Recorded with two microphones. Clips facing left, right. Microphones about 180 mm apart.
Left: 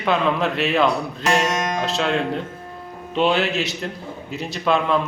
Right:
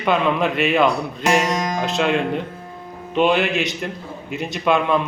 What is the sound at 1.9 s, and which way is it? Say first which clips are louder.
A man's voice: right 4 dB; 5° right (ahead or behind).